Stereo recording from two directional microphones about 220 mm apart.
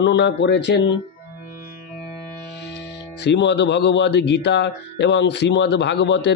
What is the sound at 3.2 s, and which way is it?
Speech, 50° left (ahead or behind).